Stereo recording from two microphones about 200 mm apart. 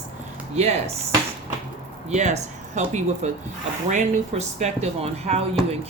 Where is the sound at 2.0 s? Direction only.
35° right (ahead or behind).